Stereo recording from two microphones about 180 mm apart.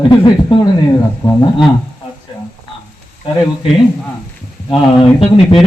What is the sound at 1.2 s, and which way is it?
Speech, 20° left (ahead or behind).